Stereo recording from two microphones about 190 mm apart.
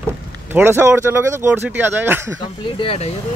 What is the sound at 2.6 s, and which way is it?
Speech, 30° left (ahead or behind).